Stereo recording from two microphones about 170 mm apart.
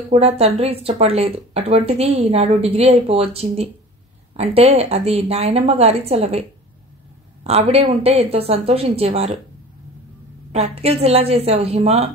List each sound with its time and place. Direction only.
0.1 s speech: 35° right (ahead or behind)
7.4 s speech: 40° right (ahead or behind)
10.5 s speech: 40° right (ahead or behind)